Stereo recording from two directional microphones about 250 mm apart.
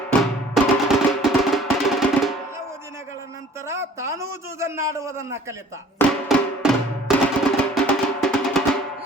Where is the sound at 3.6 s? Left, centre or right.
Centre.